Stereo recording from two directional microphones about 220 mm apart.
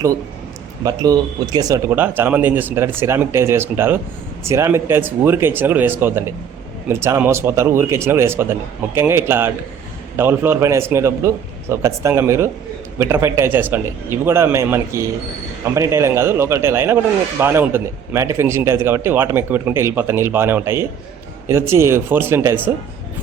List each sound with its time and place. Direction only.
0.9 s a man's voice: 15° right (ahead or behind)